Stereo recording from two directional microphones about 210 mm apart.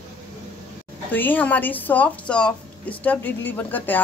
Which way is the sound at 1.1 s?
10° left (ahead or behind).